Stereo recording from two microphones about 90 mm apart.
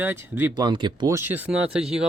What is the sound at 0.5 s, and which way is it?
Speech, 55° right (ahead or behind).